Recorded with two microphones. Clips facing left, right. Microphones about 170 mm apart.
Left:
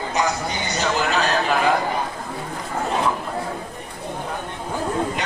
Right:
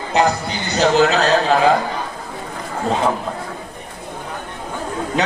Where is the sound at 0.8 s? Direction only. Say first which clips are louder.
Right 8 dB; 90° right.